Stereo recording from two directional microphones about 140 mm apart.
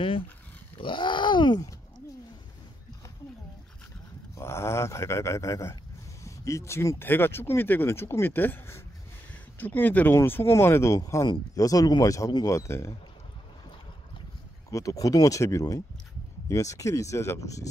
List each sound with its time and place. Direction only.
0.7 s speech: 35° left (ahead or behind)
4.4 s speech: 20° left (ahead or behind)
14.7 s speech: 25° left (ahead or behind)